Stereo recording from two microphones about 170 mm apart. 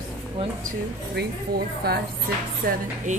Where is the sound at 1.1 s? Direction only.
70° right (ahead or behind).